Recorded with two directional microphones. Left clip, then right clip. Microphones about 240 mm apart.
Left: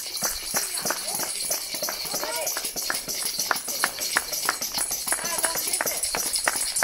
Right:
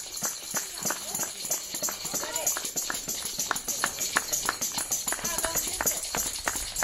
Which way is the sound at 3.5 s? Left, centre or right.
Centre.